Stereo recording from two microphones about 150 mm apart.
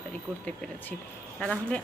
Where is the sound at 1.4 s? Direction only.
10° left (ahead or behind).